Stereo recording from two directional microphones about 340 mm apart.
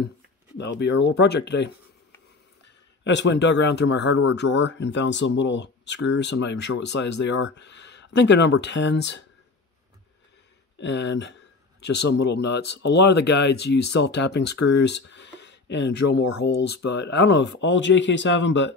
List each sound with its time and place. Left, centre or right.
0.6 s speech: left
10.8 s a sound: left
12.1 s speech: left
13.7 s speech: left
14.0 s speech: left